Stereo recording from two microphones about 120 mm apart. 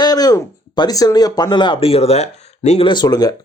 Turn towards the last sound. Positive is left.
turn(degrees=35)  # may be behind; listen again after turning